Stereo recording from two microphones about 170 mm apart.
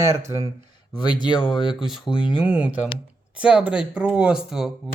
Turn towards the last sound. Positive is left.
turn(degrees=0)  # may be behind; listen again after turning